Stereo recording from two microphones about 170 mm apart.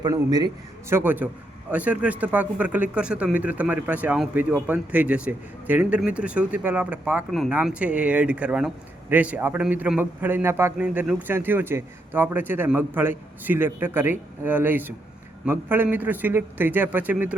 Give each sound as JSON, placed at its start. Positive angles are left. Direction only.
{"t": 0.0, "sound": "a man's voice", "side_deg": -25}